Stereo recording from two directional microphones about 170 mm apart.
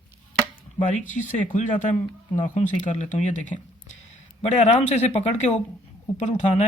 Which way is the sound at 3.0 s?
45° left (ahead or behind).